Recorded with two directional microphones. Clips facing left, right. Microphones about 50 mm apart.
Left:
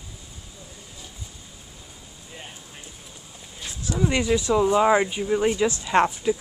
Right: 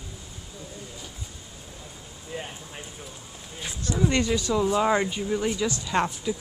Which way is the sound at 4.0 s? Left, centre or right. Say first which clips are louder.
Left 2 dB; centre.